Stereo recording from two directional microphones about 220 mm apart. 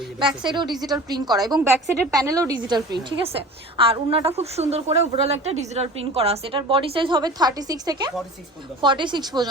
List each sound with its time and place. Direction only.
0.2 s a woman's voice: 20° right (ahead or behind)